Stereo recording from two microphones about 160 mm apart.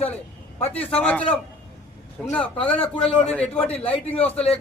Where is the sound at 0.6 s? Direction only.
10° left (ahead or behind).